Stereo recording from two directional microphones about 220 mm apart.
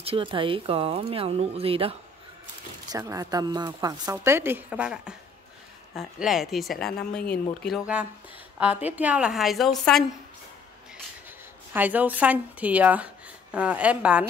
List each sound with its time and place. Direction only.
0.0 s speech: 25° right (ahead or behind)
2.9 s a woman's voice: 15° right (ahead or behind); by 10.0 s centre (ahead or behind)
11.7 s speech: 5° right (ahead or behind)